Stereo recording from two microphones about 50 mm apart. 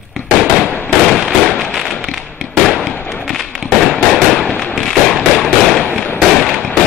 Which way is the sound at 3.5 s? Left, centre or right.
Centre.